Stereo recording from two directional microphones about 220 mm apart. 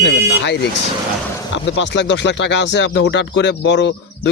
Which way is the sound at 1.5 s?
55° left (ahead or behind).